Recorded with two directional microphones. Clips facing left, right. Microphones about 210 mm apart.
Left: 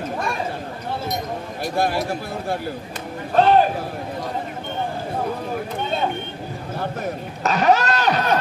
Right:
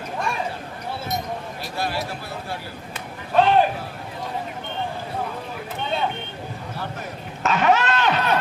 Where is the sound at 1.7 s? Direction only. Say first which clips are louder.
Left 6 dB; 50° left (ahead or behind).